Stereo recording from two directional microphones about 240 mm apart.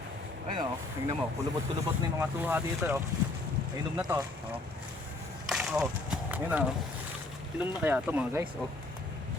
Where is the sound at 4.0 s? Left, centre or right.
Centre.